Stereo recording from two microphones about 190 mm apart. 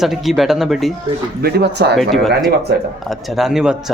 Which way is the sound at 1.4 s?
55° right (ahead or behind).